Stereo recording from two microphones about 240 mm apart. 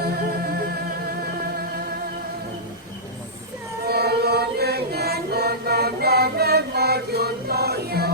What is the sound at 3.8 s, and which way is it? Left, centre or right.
Chant, right.